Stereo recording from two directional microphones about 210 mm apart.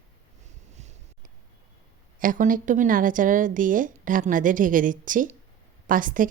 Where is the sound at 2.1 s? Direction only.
40° right (ahead or behind).